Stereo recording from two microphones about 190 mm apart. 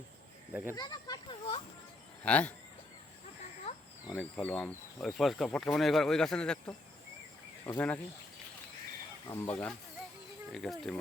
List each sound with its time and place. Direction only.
0.5 s speech: 10° right (ahead or behind)
0.8 s speech: 20° left (ahead or behind)
2.2 s speech: 5° left (ahead or behind)
3.7 s a sound: 35° left (ahead or behind)
4.1 s speech: 5° left (ahead or behind)
7.6 s speech: 10° left (ahead or behind)
9.5 s speech: 5° left (ahead or behind)